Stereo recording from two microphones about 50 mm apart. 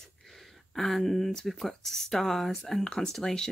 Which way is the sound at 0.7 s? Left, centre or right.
Centre.